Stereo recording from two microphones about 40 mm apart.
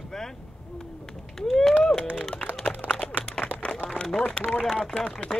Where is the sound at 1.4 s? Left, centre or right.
Centre.